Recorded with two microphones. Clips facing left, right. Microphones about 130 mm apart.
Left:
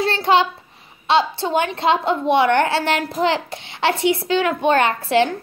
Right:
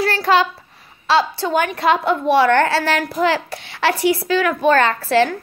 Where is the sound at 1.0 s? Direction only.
25° left (ahead or behind).